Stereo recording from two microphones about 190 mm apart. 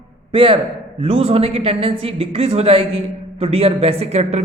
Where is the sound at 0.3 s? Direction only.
30° right (ahead or behind).